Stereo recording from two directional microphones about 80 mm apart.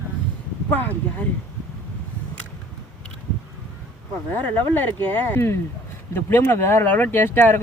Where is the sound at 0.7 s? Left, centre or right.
Centre.